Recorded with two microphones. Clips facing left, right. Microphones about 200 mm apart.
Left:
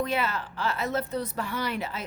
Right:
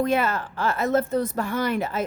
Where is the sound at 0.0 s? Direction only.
50° right (ahead or behind).